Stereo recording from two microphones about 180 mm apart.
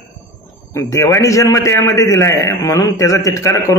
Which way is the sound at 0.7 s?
15° left (ahead or behind).